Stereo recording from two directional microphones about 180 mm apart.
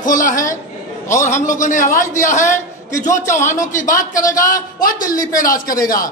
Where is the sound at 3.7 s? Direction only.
45° left (ahead or behind).